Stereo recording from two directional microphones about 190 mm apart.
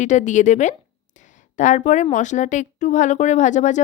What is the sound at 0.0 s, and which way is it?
Speech, 40° left (ahead or behind).